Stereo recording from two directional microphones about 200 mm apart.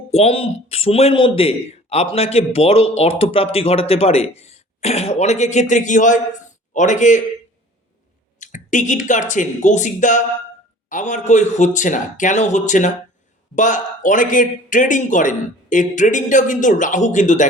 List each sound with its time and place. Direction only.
0.1 s a man's voice: 30° left (ahead or behind)
8.4 s a man's voice: 40° left (ahead or behind)